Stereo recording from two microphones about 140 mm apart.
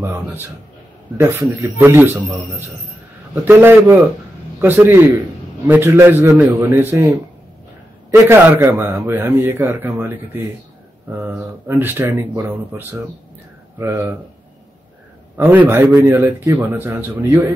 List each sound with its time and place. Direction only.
0.0 s a man's voice: 15° right (ahead or behind)
3.4 s a man's voice: 15° right (ahead or behind)
15.3 s a man's voice: 15° right (ahead or behind)